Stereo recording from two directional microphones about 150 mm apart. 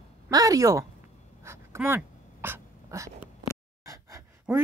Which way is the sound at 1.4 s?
20° right (ahead or behind).